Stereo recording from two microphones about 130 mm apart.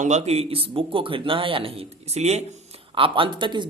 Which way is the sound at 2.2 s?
55° right (ahead or behind).